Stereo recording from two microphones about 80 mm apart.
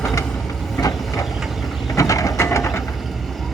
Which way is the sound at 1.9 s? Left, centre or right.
Left.